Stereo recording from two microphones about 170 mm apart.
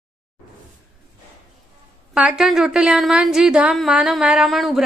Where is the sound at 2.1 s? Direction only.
5° right (ahead or behind).